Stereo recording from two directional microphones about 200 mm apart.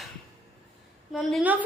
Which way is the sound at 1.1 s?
Centre (ahead or behind).